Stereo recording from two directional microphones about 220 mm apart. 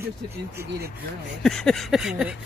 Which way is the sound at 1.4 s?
Centre (ahead or behind).